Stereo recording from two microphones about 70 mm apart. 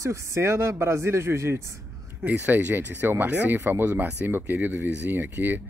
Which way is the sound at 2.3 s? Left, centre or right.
Right.